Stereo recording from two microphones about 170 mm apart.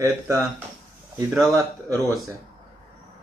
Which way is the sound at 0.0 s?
15° right (ahead or behind).